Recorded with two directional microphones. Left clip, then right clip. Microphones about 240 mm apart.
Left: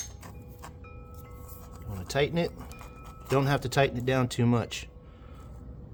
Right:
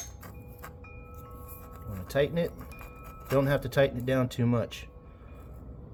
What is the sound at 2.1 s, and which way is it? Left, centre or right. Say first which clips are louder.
Speech: even; left.